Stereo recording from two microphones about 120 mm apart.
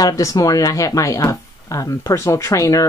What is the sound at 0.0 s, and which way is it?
Speech, 30° left (ahead or behind).